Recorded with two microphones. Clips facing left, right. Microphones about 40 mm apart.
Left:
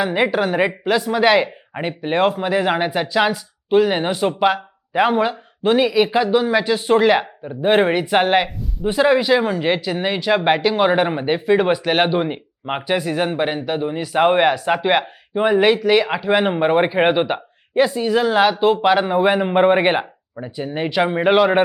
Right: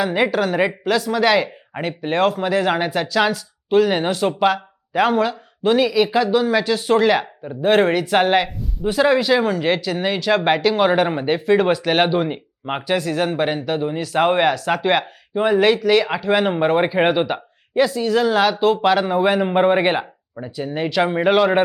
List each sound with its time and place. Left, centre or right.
0.0 s speech: centre
8.4 s speech: centre